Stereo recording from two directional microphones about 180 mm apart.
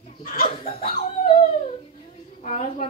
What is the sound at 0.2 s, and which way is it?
Speech, 55° left (ahead or behind).